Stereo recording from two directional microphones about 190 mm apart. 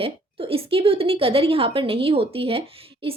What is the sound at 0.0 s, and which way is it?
A woman's voice, 30° right (ahead or behind).